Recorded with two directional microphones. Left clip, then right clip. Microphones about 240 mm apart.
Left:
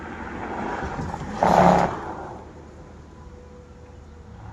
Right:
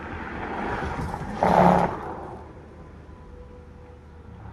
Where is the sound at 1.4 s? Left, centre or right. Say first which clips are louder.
Left 2 dB; left.